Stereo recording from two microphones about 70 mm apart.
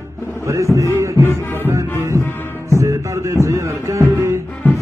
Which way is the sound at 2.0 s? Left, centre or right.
Right.